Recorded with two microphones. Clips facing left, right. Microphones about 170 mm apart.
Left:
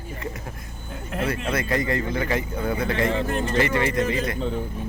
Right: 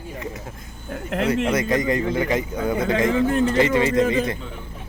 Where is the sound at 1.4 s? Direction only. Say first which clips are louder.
Right 4 dB; 20° right (ahead or behind).